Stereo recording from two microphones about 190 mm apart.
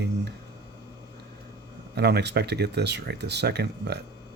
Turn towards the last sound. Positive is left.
turn(degrees=-60)  # may be behind; listen again after turning